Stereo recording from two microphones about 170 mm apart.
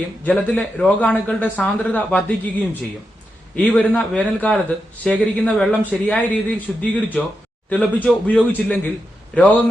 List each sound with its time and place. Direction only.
0.3 s a man's voice: 10° left (ahead or behind)